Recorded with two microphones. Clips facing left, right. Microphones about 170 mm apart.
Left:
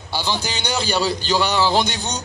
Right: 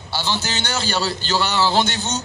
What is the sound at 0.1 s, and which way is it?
A man's voice, 15° left (ahead or behind).